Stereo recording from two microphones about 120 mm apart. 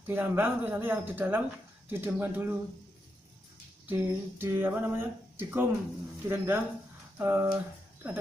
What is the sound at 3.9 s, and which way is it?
Speech, 15° right (ahead or behind).